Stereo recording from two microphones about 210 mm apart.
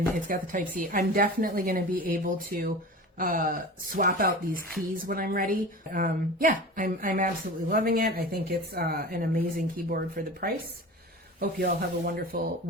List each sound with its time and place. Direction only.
0.3 s a woman's voice: 40° right (ahead or behind)